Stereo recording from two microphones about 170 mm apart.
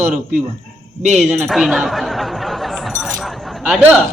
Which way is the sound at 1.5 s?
5° right (ahead or behind).